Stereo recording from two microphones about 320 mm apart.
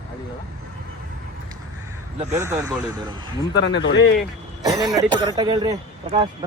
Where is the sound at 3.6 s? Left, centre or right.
Left.